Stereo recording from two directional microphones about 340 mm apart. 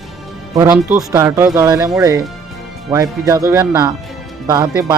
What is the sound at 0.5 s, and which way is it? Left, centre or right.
Speech, centre.